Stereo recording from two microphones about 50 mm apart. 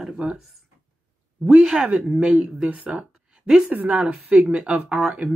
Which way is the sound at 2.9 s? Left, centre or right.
Centre.